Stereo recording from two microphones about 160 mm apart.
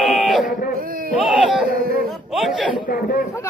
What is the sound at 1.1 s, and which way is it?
Speech, centre (ahead or behind).